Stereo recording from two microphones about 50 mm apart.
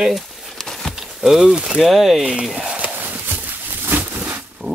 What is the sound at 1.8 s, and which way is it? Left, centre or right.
Speech, centre.